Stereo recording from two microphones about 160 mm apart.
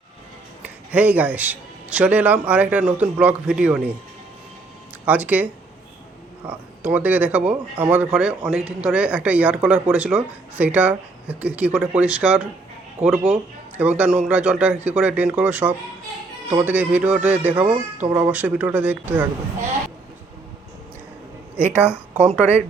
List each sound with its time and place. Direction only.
0.6 s speech: 10° right (ahead or behind)
5.0 s speech: 10° right (ahead or behind)
6.5 s speech: 10° right (ahead or behind)
21.6 s speech: 10° right (ahead or behind)